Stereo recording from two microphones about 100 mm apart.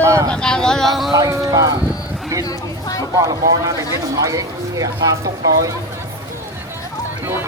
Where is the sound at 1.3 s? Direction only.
30° right (ahead or behind).